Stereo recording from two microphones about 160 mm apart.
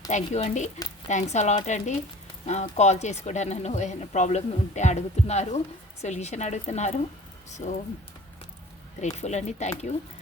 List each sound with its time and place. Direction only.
0.1 s speech: 45° left (ahead or behind)
9.0 s speech: 45° left (ahead or behind)